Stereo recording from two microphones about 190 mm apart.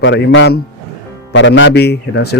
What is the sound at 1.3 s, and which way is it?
A man's voice, 75° left (ahead or behind).